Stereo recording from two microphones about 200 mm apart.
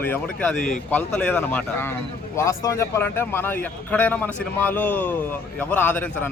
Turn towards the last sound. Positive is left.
turn(degrees=10)  # may be behind; listen again after turning